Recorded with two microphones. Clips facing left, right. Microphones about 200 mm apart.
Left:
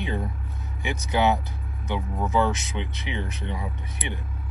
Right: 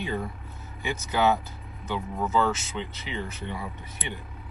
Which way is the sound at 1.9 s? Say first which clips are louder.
Left 1 dB; 15° left (ahead or behind).